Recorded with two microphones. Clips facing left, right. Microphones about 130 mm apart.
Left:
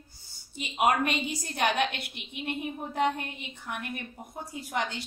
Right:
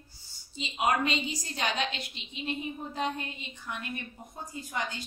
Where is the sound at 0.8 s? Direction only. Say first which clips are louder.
Left 2 dB; 60° left (ahead or behind).